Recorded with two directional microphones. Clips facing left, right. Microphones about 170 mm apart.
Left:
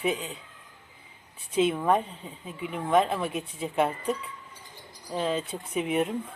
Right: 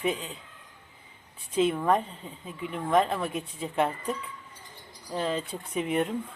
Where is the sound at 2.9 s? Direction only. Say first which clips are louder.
Left 1 dB; 5° left (ahead or behind).